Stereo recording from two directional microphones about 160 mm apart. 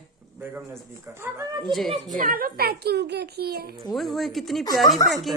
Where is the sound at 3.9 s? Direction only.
Centre (ahead or behind).